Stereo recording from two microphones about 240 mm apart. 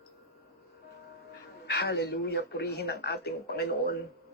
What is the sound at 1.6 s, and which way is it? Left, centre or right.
Speech, left.